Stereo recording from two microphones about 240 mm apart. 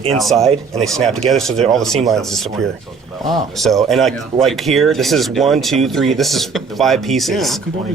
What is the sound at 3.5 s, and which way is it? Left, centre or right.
Speech, centre.